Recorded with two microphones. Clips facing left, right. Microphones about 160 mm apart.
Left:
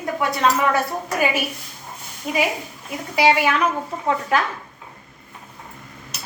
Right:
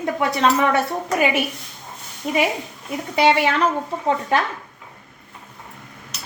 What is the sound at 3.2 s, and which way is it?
A woman's voice, 25° right (ahead or behind).